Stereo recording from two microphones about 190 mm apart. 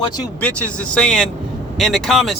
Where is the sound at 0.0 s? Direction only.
20° left (ahead or behind).